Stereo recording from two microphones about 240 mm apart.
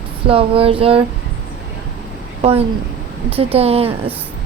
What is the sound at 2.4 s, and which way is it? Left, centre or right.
Speech, right.